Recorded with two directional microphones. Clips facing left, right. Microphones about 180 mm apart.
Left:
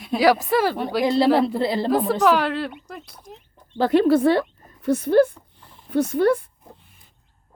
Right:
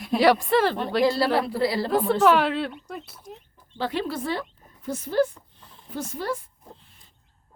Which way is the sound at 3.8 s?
55° left (ahead or behind).